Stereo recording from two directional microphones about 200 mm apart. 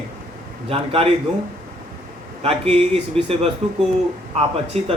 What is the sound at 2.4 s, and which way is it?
Speech, 30° right (ahead or behind).